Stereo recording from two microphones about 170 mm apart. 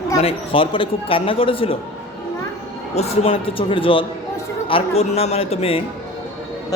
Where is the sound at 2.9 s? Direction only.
35° left (ahead or behind).